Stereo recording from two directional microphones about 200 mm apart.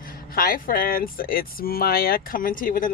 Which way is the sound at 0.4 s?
45° left (ahead or behind).